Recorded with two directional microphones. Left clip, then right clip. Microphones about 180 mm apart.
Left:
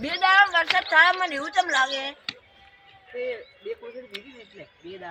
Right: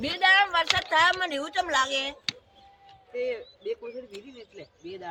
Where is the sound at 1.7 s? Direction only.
30° right (ahead or behind).